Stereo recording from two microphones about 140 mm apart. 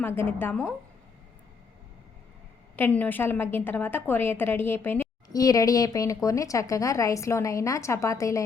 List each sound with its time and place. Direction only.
0.0 s a woman's voice: 15° left (ahead or behind)
2.7 s a woman's voice: 15° left (ahead or behind)